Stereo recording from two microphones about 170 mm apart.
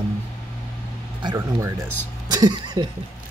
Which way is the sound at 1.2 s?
15° right (ahead or behind).